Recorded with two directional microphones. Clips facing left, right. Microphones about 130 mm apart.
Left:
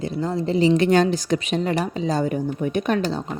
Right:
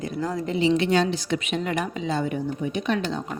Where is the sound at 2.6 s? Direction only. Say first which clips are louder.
Left 5 dB; 50° left (ahead or behind).